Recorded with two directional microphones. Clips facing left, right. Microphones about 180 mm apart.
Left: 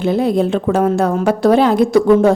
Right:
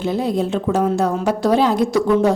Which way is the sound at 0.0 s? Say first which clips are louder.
Left 5 dB; 60° left (ahead or behind).